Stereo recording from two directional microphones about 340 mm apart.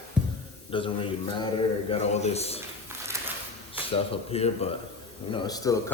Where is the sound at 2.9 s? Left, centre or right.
Centre.